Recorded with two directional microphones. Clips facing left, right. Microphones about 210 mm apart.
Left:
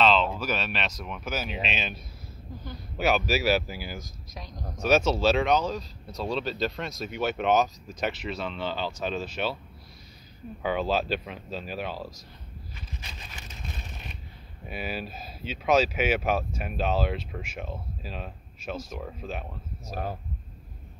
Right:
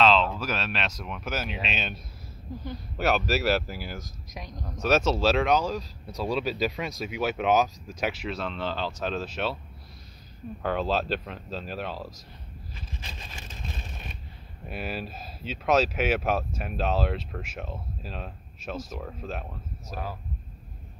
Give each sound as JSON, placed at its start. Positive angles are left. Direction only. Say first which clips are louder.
{"t": 0.0, "sound": "speech", "louder": "right 1 dB", "side_deg": 0}
{"t": 3.0, "sound": "speech", "louder": "even", "side_deg": 0}
{"t": 10.6, "sound": "speech", "louder": "even", "side_deg": 5}
{"t": 14.7, "sound": "speech", "louder": "even", "side_deg": 0}